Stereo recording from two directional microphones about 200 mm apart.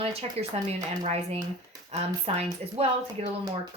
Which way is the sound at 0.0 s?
30° right (ahead or behind).